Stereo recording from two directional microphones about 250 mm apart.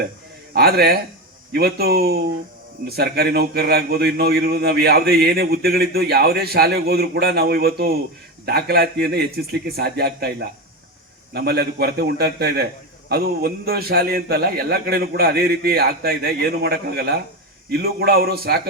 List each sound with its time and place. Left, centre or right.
0.5 s a man's voice: right
11.3 s a man's voice: right